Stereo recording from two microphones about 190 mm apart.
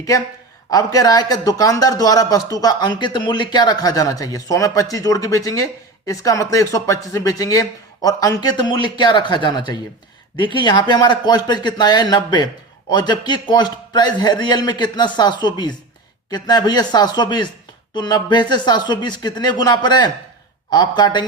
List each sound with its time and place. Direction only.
0.7 s speech: 20° left (ahead or behind)